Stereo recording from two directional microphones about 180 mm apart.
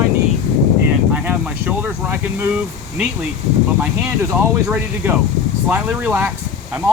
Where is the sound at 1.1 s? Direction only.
10° right (ahead or behind).